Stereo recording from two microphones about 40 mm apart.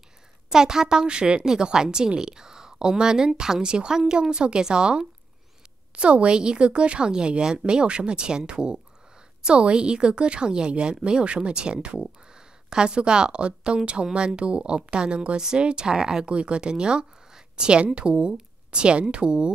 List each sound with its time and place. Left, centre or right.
0.5 s speech: centre
16.3 s speech: right